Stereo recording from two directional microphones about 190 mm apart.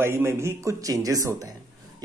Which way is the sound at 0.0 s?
10° right (ahead or behind).